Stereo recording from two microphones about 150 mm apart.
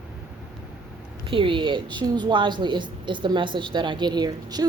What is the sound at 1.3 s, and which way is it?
A woman's voice, 35° right (ahead or behind).